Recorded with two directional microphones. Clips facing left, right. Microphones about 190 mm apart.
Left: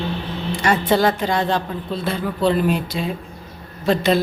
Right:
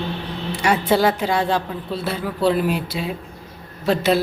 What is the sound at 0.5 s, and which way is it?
A man's voice, 10° right (ahead or behind).